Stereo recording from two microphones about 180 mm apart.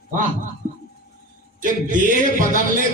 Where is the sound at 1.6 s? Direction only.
45° right (ahead or behind).